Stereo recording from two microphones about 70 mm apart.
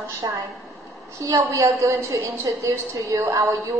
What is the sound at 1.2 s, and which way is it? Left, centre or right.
A woman's voice, right.